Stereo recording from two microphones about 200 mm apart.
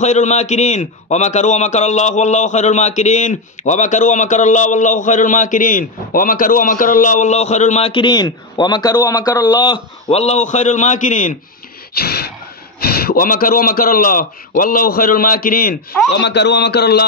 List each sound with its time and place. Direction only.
0.0 s a man's voice: 35° left (ahead or behind)
11.9 s a sound: 50° left (ahead or behind)
12.8 s a man's voice: 50° left (ahead or behind)
16.1 s a man's voice: 55° left (ahead or behind)